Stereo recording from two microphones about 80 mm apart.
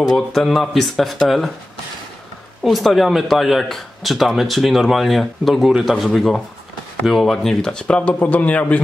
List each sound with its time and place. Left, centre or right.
0.0 s speech: centre
2.6 s speech: centre